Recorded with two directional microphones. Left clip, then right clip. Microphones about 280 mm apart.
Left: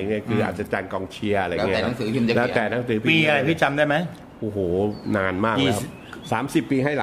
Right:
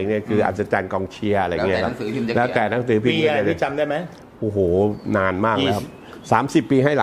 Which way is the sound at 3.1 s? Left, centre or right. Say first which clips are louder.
Left 4 dB; left.